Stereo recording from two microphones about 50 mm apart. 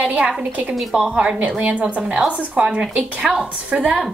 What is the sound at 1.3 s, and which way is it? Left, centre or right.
A woman's voice, right.